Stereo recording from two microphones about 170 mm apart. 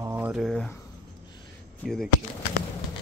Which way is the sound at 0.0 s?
15° right (ahead or behind).